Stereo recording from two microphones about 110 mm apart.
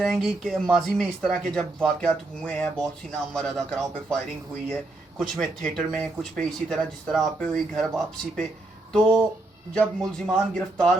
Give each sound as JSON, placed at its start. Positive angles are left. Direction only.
{"t": 0.0, "sound": "speech", "side_deg": 0}